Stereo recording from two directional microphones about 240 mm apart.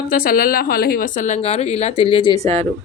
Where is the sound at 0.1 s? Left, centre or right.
Left.